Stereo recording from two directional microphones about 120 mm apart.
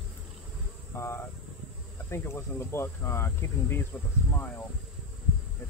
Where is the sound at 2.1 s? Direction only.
20° left (ahead or behind).